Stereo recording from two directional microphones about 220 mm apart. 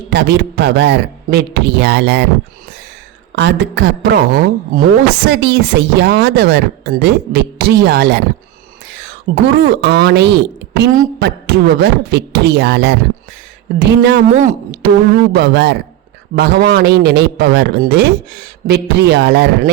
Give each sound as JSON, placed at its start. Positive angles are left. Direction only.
{"t": 0.1, "sound": "a man's voice", "side_deg": -50}
{"t": 3.3, "sound": "a man's voice", "side_deg": -50}